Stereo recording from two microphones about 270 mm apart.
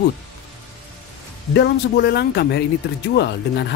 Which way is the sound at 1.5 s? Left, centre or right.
Left.